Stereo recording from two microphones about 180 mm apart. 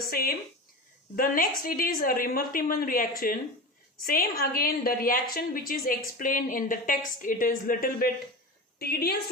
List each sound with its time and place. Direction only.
0.1 s a woman's voice: 55° left (ahead or behind)